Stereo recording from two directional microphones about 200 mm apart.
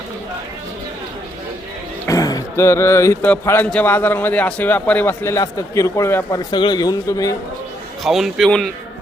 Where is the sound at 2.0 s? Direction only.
15° left (ahead or behind).